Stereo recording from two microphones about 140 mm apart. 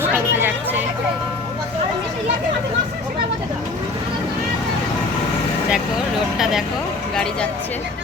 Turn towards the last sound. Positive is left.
turn(degrees=-5)  # may be behind; listen again after turning